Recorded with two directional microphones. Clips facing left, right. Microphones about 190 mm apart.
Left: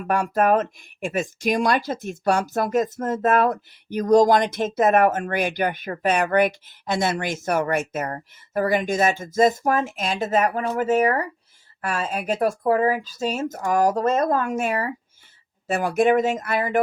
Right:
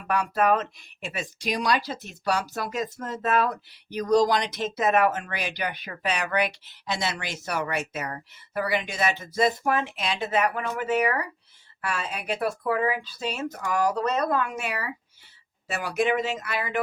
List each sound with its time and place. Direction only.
0.0 s speech: 45° left (ahead or behind)